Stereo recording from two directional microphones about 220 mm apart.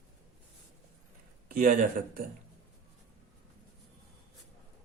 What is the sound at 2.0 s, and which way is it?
Speech, 40° right (ahead or behind).